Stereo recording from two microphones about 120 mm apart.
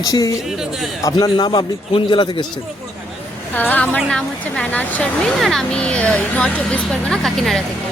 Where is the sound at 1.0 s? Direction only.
35° left (ahead or behind).